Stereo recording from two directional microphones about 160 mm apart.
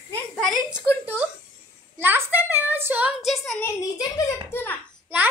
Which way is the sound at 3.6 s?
20° left (ahead or behind).